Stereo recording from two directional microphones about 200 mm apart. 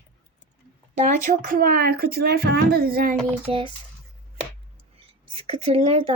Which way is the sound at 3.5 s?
30° right (ahead or behind).